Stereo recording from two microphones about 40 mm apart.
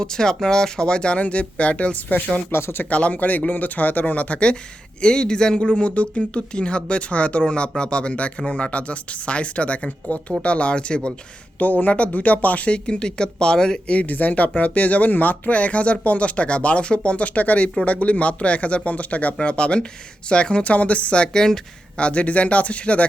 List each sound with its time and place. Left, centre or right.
0.0 s speech: centre
2.5 s speech: left
2.9 s speech: left
11.6 s speech: left; by 13.8 s centre
13.8 s speech: left
14.1 s speech: left
21.3 s speech: centre
21.9 s speech: left